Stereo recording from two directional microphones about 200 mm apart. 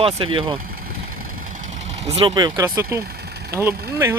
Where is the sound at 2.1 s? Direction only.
30° right (ahead or behind).